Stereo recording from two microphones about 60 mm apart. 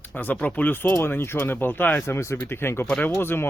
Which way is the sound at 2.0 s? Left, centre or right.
Left.